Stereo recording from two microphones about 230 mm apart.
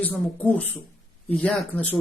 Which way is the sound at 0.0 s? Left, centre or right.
Centre.